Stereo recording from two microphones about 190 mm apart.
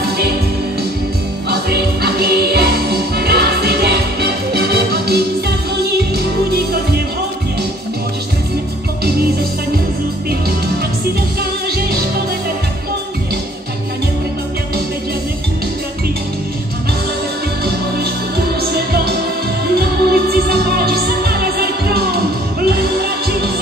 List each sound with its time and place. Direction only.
1.5 s music: 60° right (ahead or behind)
18.7 s music: 55° right (ahead or behind)